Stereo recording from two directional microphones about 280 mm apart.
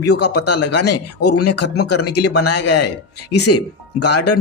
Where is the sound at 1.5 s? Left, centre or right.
Left.